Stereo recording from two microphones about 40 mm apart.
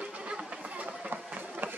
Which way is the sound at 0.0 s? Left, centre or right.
Right.